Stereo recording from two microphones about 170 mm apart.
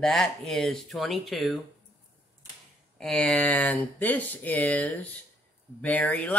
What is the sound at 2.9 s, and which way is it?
Speech, 5° left (ahead or behind).